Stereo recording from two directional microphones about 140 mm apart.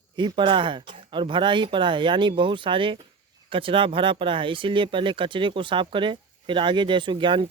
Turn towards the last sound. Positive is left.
turn(degrees=-35)  # may be behind; listen again after turning